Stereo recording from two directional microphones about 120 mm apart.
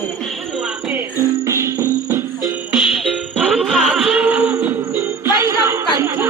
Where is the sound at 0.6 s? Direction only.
15° right (ahead or behind).